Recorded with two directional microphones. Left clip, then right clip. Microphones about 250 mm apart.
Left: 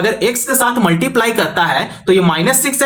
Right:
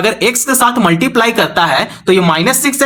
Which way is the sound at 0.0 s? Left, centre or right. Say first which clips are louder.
Right 3 dB; right.